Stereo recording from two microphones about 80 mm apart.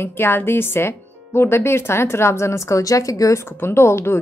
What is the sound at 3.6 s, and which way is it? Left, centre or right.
Speech, left.